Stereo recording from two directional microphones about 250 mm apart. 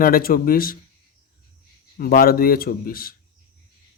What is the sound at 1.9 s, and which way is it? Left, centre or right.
Speech, left.